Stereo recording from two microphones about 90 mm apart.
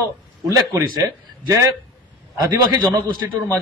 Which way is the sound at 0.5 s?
30° right (ahead or behind).